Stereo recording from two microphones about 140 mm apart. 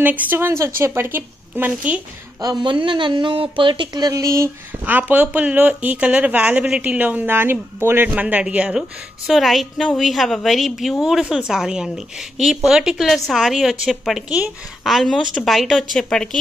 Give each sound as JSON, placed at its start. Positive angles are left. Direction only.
{"t": 0.0, "sound": "speech", "side_deg": -15}
{"t": 2.4, "sound": "speech", "side_deg": -30}
{"t": 4.8, "sound": "a woman's voice", "side_deg": -10}